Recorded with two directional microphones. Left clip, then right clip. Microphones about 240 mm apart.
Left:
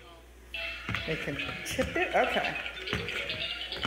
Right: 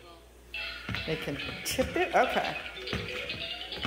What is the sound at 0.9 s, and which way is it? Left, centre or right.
Speech, centre.